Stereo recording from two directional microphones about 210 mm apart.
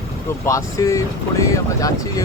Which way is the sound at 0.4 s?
15° left (ahead or behind).